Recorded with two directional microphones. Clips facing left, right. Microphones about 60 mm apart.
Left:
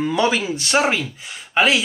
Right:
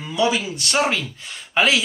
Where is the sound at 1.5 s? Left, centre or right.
Centre.